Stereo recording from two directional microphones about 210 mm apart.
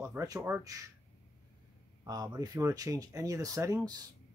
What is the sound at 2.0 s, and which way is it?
Speech, 20° right (ahead or behind).